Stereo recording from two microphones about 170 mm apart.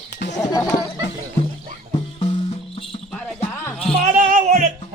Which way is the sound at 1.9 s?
35° left (ahead or behind).